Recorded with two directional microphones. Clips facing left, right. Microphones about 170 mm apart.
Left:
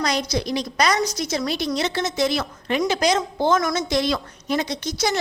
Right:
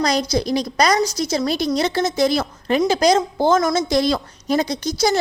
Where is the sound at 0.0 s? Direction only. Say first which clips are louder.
Right 4 dB; 35° right (ahead or behind).